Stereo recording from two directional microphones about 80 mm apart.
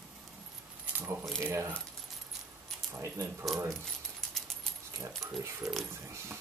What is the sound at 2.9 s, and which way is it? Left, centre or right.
Speech, right.